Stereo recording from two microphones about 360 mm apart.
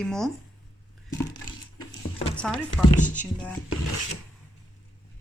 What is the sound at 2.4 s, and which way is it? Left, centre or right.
Speech, centre.